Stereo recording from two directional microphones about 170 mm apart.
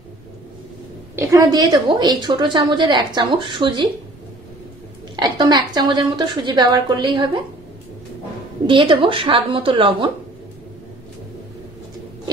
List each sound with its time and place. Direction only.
1.1 s a woman's voice: 15° right (ahead or behind)
5.1 s a woman's voice: 25° right (ahead or behind)
8.6 s speech: 30° right (ahead or behind)